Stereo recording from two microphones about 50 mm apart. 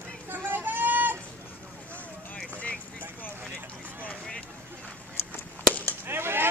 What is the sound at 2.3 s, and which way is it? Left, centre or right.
Vehicle, left.